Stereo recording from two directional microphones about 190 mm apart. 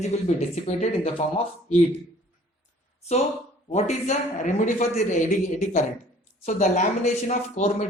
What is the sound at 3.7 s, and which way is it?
Speech, 35° left (ahead or behind).